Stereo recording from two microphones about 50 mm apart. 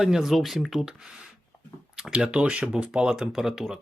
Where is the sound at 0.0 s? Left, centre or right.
Centre.